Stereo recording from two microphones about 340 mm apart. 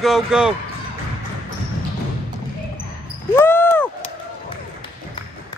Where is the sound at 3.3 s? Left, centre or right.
Centre.